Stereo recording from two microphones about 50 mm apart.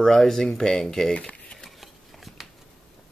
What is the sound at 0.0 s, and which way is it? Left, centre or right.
Speech, centre.